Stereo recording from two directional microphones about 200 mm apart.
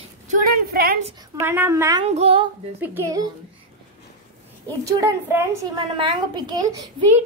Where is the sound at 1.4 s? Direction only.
10° right (ahead or behind).